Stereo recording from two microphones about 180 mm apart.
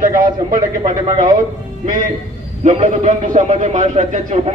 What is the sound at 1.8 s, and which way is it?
A man's voice, 45° right (ahead or behind).